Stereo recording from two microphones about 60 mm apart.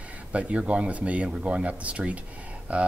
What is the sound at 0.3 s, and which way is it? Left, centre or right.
Speech, right.